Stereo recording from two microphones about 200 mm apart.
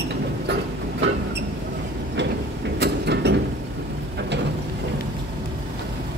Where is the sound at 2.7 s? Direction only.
55° right (ahead or behind).